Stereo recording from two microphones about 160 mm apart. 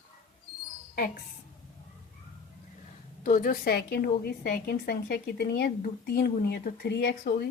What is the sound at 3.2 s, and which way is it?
A woman's voice, 60° left (ahead or behind).